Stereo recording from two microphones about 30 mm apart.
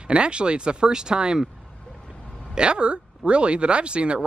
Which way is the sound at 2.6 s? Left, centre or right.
Right.